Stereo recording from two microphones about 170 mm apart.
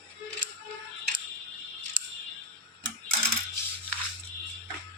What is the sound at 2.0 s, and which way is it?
Music, 50° right (ahead or behind).